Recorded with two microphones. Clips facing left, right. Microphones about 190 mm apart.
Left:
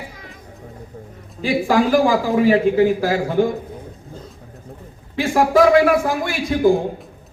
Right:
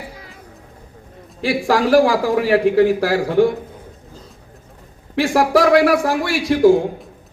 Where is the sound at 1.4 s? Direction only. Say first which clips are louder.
Even; 80° right.